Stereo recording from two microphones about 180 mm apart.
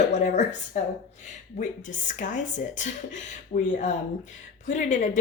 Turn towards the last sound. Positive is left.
turn(degrees=45)  # may be behind; listen again after turning